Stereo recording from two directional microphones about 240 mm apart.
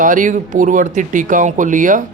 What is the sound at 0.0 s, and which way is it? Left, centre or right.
Speech, right.